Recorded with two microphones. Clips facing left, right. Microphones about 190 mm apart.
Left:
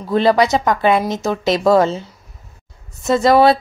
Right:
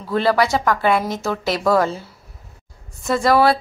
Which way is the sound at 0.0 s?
20° left (ahead or behind).